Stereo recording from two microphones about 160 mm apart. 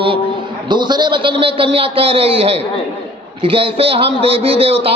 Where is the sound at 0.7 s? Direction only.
30° right (ahead or behind).